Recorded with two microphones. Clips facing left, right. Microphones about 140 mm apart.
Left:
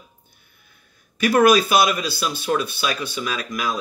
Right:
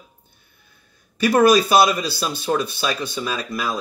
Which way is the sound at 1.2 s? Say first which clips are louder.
Right 1 dB; 35° right (ahead or behind).